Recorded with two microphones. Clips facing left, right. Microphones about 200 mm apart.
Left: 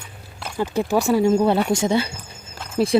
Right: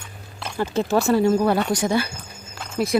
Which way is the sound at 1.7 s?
25° left (ahead or behind).